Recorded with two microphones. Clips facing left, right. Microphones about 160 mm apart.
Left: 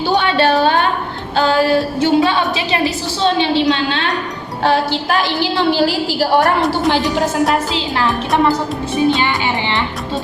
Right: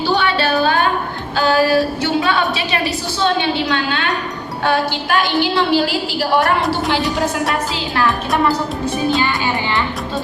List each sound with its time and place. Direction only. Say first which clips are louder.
0.5 s a sound: left 2 dB; 25° left (ahead or behind)
1.4 s music: left 1 dB; 25° left (ahead or behind)
3.7 s music: left 3 dB; 30° left (ahead or behind)
4.6 s a woman's voice: left 3 dB; 30° left (ahead or behind)
7.7 s music: left 1 dB; 20° left (ahead or behind)